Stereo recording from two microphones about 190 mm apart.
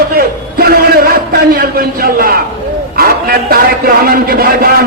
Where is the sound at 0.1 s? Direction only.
55° right (ahead or behind).